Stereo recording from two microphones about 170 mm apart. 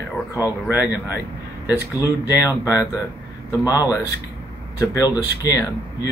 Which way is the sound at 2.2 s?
20° left (ahead or behind).